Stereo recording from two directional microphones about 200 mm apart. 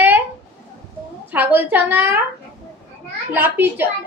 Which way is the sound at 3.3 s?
10° right (ahead or behind).